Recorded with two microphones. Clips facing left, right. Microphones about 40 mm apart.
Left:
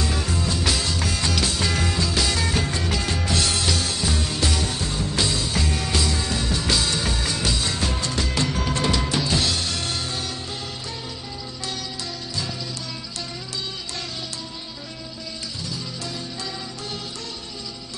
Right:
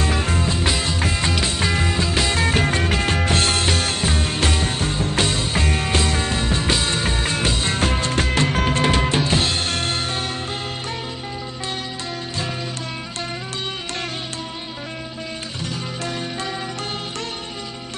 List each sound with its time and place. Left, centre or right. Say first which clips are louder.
0.0 s music: right 4 dB; right